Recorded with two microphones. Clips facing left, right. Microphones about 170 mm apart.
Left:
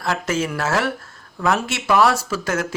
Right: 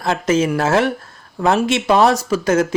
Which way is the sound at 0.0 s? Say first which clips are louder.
Right 6 dB; 20° right (ahead or behind).